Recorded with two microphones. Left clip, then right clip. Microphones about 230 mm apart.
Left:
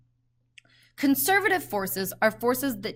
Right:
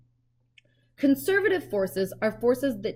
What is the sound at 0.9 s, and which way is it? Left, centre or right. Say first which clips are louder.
A woman's voice: left 1 dB; centre.